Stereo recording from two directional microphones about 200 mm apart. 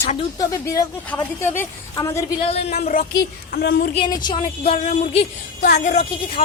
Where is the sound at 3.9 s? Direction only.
25° left (ahead or behind).